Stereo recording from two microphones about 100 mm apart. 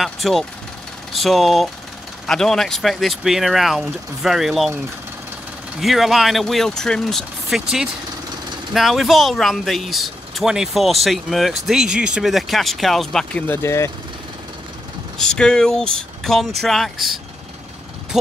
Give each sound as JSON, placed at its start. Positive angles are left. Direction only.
{"t": 0.0, "sound": "speech", "side_deg": 0}
{"t": 5.8, "sound": "speech", "side_deg": 0}
{"t": 8.7, "sound": "speech", "side_deg": 0}
{"t": 13.5, "sound": "speech", "side_deg": 25}
{"t": 15.1, "sound": "speech", "side_deg": 5}